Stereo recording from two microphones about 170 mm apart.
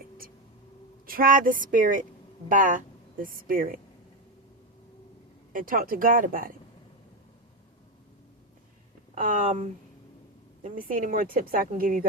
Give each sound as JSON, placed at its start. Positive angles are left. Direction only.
{"t": 1.0, "sound": "a woman's voice", "side_deg": -55}
{"t": 5.5, "sound": "a woman's voice", "side_deg": -55}
{"t": 9.2, "sound": "a woman's voice", "side_deg": -50}